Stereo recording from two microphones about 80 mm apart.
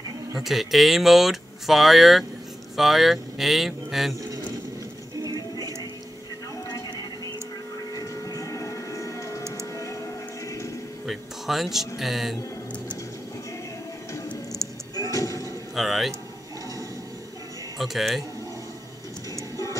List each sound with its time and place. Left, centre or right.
0.4 s speech: centre
6.7 s a sound: left
7.9 s printer: left
9.8 s music: left
11.1 s speech: centre
15.0 s slam: left
15.7 s speech: centre
17.7 s speech: centre
19.5 s music: left